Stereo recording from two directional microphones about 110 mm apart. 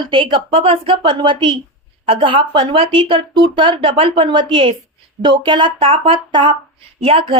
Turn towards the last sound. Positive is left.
turn(degrees=-55)  # may be behind; listen again after turning